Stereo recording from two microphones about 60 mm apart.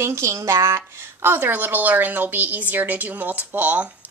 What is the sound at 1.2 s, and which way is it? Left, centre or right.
A woman's voice, right.